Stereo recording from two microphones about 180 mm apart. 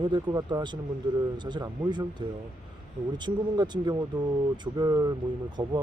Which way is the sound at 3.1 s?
25° right (ahead or behind).